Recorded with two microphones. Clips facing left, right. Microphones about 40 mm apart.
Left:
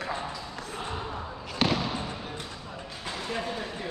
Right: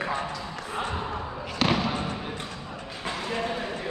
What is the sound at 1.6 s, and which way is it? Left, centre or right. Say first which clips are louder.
Basketball bounce: right 2 dB; centre.